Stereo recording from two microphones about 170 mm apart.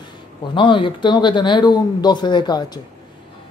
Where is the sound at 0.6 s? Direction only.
30° left (ahead or behind).